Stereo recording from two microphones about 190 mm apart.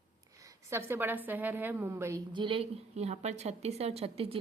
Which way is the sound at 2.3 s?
25° right (ahead or behind).